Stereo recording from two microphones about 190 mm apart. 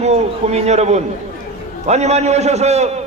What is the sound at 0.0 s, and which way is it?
A man's voice, 35° right (ahead or behind).